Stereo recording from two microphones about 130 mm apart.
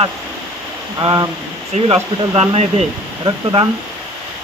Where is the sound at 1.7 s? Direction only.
60° right (ahead or behind).